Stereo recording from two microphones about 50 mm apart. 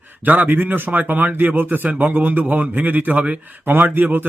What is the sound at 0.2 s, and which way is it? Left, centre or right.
Speech, right.